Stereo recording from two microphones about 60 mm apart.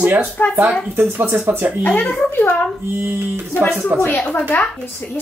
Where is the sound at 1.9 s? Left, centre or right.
Left.